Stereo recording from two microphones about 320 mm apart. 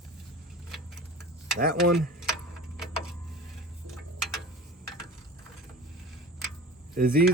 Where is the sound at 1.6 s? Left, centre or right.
Right.